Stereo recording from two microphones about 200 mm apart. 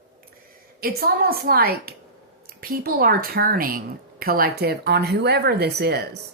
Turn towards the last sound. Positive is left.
turn(degrees=-55)  # may be behind; listen again after turning